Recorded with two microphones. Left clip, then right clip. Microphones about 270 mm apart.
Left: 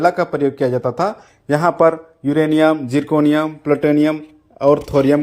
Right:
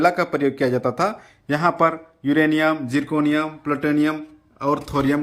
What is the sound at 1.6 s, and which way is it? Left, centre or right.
A man's voice, left.